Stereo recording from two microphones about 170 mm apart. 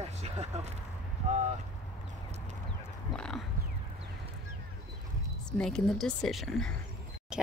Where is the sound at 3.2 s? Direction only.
5° left (ahead or behind).